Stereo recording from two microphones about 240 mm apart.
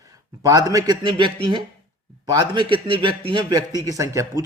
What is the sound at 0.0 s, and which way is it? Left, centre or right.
A man's voice, centre.